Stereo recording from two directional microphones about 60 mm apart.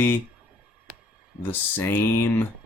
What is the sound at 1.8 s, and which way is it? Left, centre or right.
Speech, left.